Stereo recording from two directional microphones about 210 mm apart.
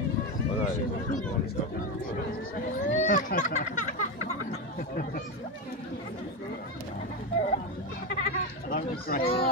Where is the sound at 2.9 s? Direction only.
35° left (ahead or behind).